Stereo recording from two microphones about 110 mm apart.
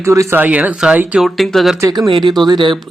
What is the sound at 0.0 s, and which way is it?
Speech, 25° right (ahead or behind).